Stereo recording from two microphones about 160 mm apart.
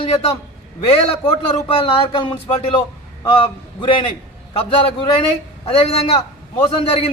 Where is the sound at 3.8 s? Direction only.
35° left (ahead or behind).